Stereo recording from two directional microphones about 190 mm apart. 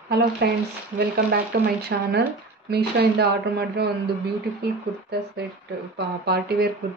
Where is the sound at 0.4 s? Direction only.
55° right (ahead or behind).